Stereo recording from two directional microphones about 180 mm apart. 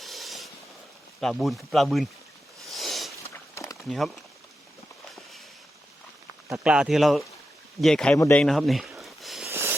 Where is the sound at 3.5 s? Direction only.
15° left (ahead or behind).